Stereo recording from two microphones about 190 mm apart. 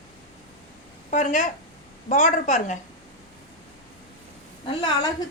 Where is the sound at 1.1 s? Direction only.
40° left (ahead or behind).